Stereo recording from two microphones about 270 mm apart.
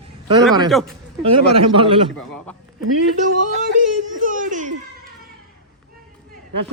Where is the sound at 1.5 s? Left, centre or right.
Centre.